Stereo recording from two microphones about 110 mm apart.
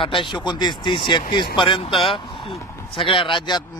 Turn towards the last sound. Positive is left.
turn(degrees=45)  # may be behind; listen again after turning